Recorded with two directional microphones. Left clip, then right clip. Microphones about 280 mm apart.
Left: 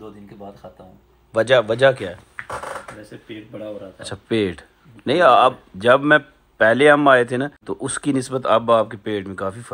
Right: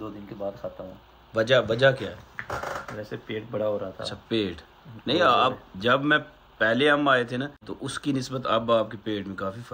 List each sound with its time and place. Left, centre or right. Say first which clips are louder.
1.3 s speech: left 6 dB; centre
4.0 s speech: left 6 dB; left